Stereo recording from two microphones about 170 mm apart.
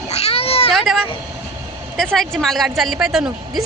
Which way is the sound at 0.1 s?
35° left (ahead or behind).